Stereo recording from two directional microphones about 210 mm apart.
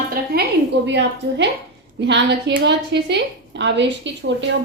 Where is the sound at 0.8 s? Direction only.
55° right (ahead or behind).